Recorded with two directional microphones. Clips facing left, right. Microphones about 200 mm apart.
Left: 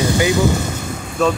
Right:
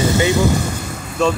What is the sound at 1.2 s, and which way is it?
Speech, centre (ahead or behind).